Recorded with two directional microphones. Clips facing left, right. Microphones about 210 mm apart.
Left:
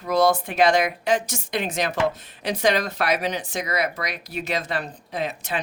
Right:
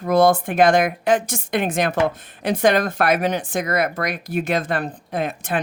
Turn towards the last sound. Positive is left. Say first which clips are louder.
# right 4 dB
turn(degrees=-50)  # may be behind; listen again after turning